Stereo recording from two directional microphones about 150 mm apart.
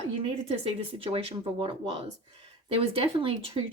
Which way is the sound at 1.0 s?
40° right (ahead or behind).